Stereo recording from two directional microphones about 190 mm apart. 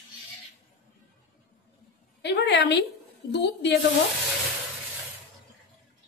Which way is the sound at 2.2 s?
65° left (ahead or behind).